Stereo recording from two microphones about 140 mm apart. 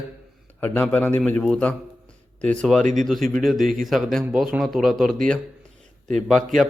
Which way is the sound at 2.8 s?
60° right (ahead or behind).